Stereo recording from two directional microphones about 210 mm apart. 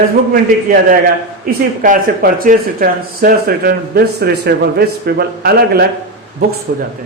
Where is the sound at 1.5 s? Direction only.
40° right (ahead or behind).